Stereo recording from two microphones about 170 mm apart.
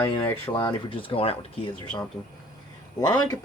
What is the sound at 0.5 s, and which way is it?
Speech, 25° left (ahead or behind).